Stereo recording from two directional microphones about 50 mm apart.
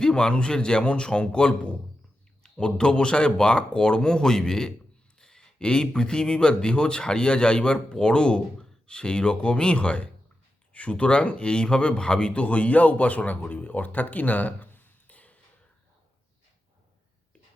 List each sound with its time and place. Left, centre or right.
0.0 s a man's voice: centre; by 15.4 s left